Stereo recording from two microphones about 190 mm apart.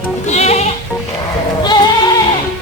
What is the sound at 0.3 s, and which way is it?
Music, 35° left (ahead or behind).